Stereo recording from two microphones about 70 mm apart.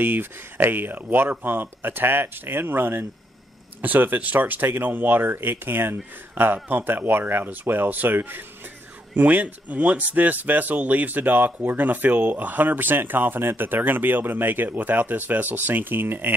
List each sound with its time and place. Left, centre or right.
0.0 s speech: right